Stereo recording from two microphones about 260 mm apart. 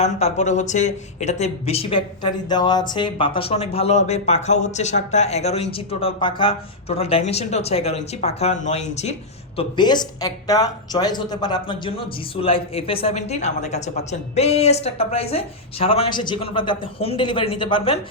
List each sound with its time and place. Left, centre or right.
0.0 s speech: left